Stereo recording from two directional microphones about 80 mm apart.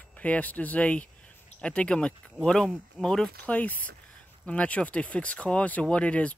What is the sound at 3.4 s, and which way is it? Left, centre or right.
Speech, centre.